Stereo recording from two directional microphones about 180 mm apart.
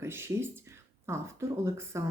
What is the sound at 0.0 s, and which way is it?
Speech, 15° right (ahead or behind).